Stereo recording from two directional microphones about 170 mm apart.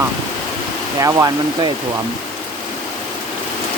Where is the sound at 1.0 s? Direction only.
20° right (ahead or behind).